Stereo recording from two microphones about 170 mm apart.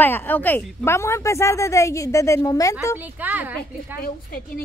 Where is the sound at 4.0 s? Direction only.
55° left (ahead or behind).